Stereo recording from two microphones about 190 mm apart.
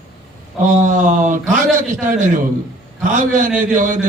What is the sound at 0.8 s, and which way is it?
A man's voice, 40° right (ahead or behind).